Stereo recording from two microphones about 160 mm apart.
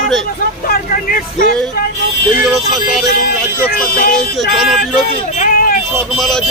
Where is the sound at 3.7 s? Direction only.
65° left (ahead or behind).